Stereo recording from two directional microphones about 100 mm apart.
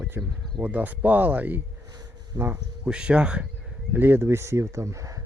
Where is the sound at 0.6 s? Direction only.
15° right (ahead or behind).